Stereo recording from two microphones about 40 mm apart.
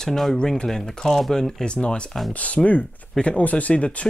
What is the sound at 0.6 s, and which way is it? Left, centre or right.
Speech, centre.